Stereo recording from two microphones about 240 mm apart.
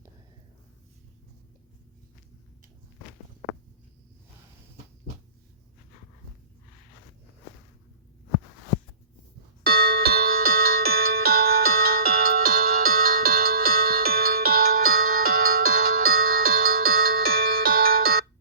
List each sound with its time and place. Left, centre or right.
9.6 s music: right
14.7 s music: right
16.2 s music: right